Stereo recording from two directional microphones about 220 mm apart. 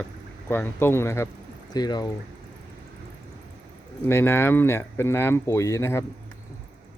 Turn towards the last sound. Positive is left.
turn(degrees=15)  # may be behind; listen again after turning